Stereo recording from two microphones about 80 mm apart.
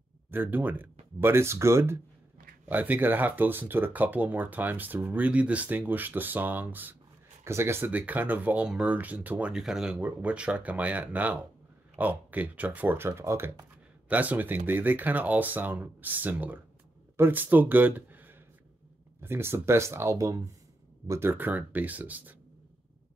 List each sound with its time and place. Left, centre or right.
0.3 s speech: right
2.7 s speech: right
9.5 s speech: centre
9.9 s speech: centre; by 13.7 s right
14.0 s speech: centre